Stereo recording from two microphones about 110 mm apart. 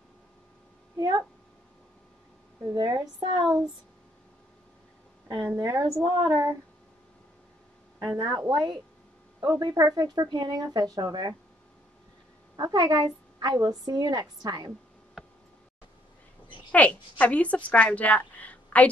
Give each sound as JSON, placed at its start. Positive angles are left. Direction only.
{"t": 0.9, "sound": "speech", "side_deg": -40}
{"t": 2.6, "sound": "a woman's voice", "side_deg": -40}
{"t": 5.6, "sound": "a woman's voice", "side_deg": -35}
{"t": 8.2, "sound": "a woman's voice", "side_deg": -35}
{"t": 12.5, "sound": "a woman's voice", "side_deg": -40}
{"t": 16.7, "sound": "a woman's voice", "side_deg": 15}